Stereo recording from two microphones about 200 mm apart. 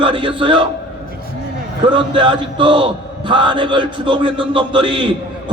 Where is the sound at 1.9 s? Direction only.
25° right (ahead or behind).